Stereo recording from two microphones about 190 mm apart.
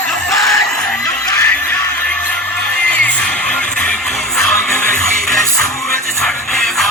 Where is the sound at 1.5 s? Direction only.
5° left (ahead or behind).